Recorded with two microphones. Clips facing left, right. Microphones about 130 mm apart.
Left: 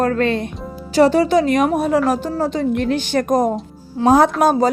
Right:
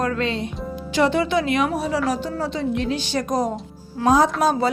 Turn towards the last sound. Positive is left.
turn(degrees=45)  # may be behind; listen again after turning